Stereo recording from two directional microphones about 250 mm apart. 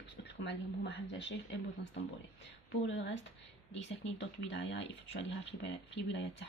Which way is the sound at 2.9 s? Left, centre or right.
Left.